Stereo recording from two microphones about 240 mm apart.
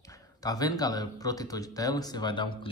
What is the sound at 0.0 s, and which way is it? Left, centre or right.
A man's voice, centre.